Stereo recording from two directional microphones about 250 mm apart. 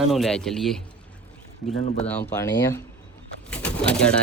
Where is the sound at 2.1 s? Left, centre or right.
Centre.